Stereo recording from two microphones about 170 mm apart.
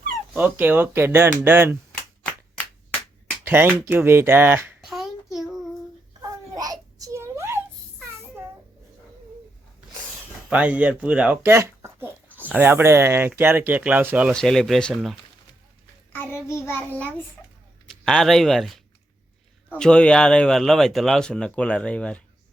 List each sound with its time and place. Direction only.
0.3 s speech: 10° right (ahead or behind)
3.4 s speech: 10° right (ahead or behind)
4.9 s child singing: centre (ahead or behind)
6.5 s a sound: 20° right (ahead or behind)
10.5 s speech: 10° right (ahead or behind)
14.3 s speech: 5° left (ahead or behind)
16.1 s child singing: 15° left (ahead or behind)
18.0 s speech: 5° left (ahead or behind)